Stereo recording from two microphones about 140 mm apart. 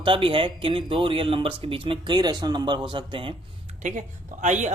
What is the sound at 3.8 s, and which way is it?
Speech, 60° right (ahead or behind).